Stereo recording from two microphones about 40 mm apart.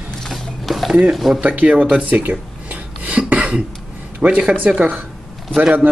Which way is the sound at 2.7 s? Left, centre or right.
Right.